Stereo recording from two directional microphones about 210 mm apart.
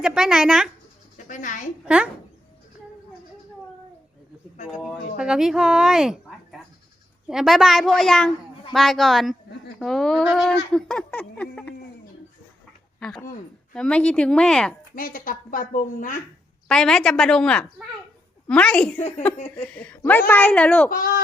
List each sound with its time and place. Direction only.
0.0 s speech: 5° right (ahead or behind)
1.3 s a woman's voice: 35° left (ahead or behind)
1.8 s speech: 5° right (ahead or behind)
4.7 s speech: centre (ahead or behind)
13.0 s speech: centre (ahead or behind)
14.9 s a woman's voice: 40° left (ahead or behind)
16.6 s speech: 5° left (ahead or behind)